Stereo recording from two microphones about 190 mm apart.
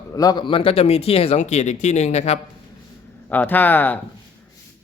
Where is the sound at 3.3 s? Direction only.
10° left (ahead or behind).